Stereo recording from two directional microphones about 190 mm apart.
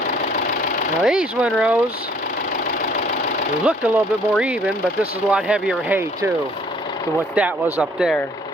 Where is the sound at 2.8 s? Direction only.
40° left (ahead or behind).